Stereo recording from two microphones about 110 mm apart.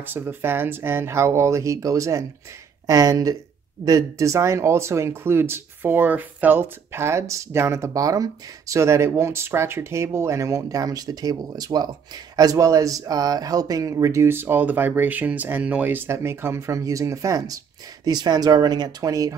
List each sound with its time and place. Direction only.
0.0 s speech: 15° right (ahead or behind); by 19.3 s 35° right (ahead or behind)